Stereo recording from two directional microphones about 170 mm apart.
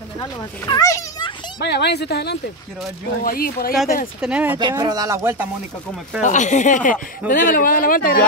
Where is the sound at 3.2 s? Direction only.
60° left (ahead or behind).